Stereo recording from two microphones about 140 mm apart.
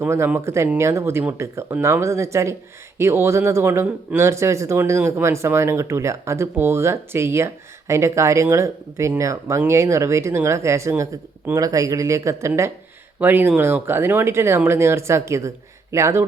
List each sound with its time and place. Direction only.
0.0 s speech: 15° right (ahead or behind)